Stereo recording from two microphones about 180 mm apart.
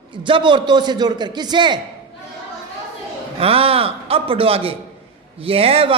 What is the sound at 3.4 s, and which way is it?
A man's voice, 30° right (ahead or behind).